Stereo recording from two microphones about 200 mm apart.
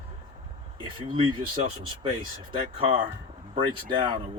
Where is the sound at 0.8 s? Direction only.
25° right (ahead or behind).